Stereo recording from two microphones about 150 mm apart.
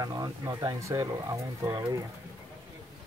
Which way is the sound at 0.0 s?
25° right (ahead or behind).